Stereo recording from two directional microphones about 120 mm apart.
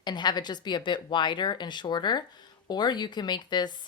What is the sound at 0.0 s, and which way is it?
Speech, 35° left (ahead or behind).